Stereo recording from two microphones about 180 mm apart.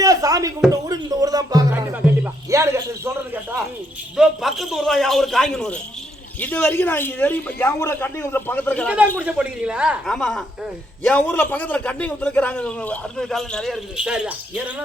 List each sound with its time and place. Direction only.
0.0 s a sound: 20° right (ahead or behind)
0.7 s music: 20° right (ahead or behind)
4.2 s a man's voice: centre (ahead or behind)
9.1 s a man's voice: 5° right (ahead or behind)